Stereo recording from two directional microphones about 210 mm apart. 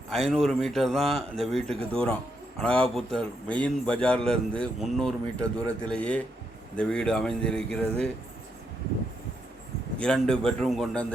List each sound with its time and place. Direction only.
0.1 s a man's voice: centre (ahead or behind)
10.0 s a man's voice: 5° left (ahead or behind)